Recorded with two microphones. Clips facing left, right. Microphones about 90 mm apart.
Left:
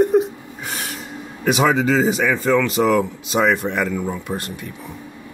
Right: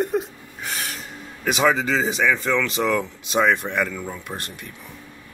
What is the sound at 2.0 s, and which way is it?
Speech, 45° left (ahead or behind).